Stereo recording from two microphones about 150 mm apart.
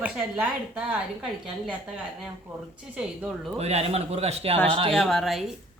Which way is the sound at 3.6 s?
45° right (ahead or behind).